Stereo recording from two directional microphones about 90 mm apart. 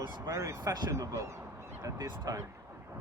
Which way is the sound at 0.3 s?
35° right (ahead or behind).